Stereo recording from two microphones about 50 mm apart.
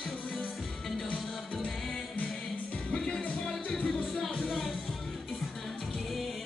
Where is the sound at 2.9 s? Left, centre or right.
Centre.